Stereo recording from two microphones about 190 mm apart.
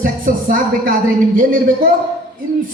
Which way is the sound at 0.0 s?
45° right (ahead or behind).